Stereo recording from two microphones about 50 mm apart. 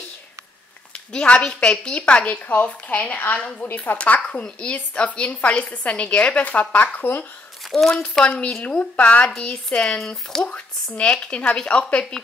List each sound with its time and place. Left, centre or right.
0.9 s a woman's voice: left
2.4 s a woman's voice: left
4.0 s a woman's voice: left
7.9 s a woman's voice: centre
10.4 s a woman's voice: left